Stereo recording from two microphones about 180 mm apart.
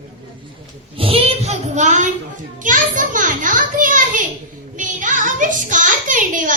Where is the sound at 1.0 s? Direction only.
30° right (ahead or behind); by 4.2 s 45° right (ahead or behind).